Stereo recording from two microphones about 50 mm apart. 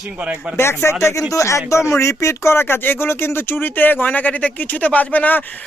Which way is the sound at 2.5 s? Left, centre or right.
Left.